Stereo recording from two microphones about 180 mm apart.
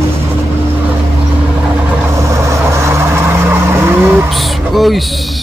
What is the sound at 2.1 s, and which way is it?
Vehicle, 15° right (ahead or behind).